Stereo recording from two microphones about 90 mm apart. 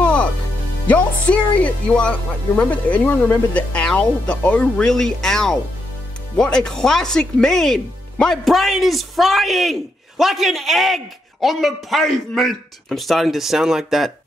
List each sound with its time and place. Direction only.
0.0 s music: 15° left (ahead or behind)
0.8 s speech: 15° left (ahead or behind); by 14.1 s 5° right (ahead or behind)